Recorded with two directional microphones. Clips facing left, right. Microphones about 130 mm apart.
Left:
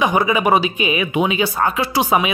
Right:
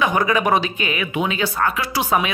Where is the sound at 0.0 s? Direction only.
10° left (ahead or behind).